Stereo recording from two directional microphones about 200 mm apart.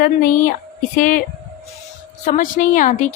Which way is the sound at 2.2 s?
40° left (ahead or behind).